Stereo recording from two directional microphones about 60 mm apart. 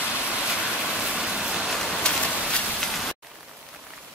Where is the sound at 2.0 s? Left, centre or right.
Centre.